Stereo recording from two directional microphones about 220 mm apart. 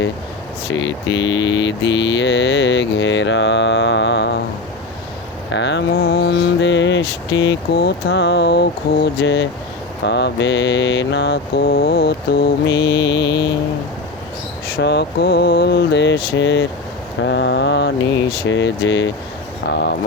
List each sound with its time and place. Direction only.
0.7 s mantra: 55° left (ahead or behind)
5.5 s mantra: 55° left (ahead or behind)
11.5 s mantra: 40° left (ahead or behind)
14.8 s mantra: 50° left (ahead or behind)